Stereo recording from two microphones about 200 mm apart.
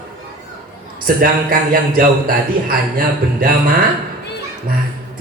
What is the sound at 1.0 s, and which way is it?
A man's voice, 45° right (ahead or behind).